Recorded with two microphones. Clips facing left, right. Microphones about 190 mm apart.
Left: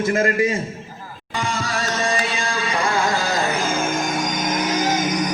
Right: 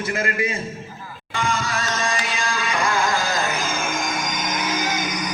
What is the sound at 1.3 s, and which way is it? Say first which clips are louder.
Music: even; 35° left (ahead or behind).